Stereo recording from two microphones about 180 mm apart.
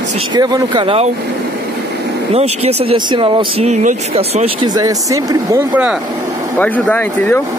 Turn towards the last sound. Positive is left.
turn(degrees=10)  # may be behind; listen again after turning